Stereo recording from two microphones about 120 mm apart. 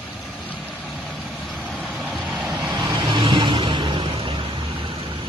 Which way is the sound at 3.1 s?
40° right (ahead or behind).